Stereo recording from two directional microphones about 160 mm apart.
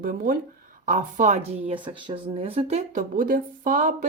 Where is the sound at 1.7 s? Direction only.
30° right (ahead or behind).